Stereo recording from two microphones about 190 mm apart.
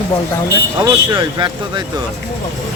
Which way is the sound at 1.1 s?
25° right (ahead or behind).